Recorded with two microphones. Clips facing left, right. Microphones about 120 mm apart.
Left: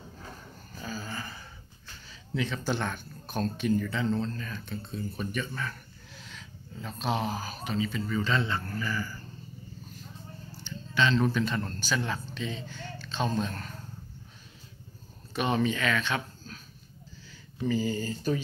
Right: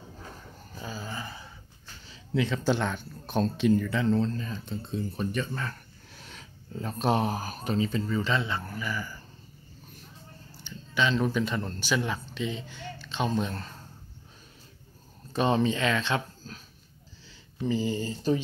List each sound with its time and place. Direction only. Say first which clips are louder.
0.7 s dog: even; 20° right (ahead or behind)
2.0 s speech: right 4 dB; 20° right (ahead or behind)
4.1 s speech: right 4 dB; 30° right (ahead or behind)
6.1 s speech: even; 50° right (ahead or behind)
8.2 s speech: even; 20° right (ahead or behind)
10.6 s a sound: even; 10° right (ahead or behind)
11.3 s speech: right 1 dB; 15° right (ahead or behind)
15.3 s speech: right 3 dB; 30° right (ahead or behind)
17.6 s speech: even; 25° right (ahead or behind)